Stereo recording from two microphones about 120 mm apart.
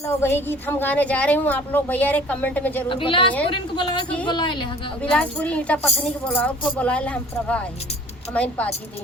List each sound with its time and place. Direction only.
0.1 s a woman's voice: 20° left (ahead or behind)
2.9 s a woman's voice: 45° left (ahead or behind)
5.1 s a woman's voice: 10° left (ahead or behind)